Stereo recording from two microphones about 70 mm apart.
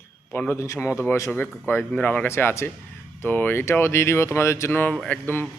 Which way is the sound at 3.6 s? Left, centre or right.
Left.